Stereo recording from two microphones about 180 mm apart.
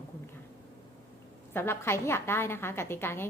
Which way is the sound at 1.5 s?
15° left (ahead or behind).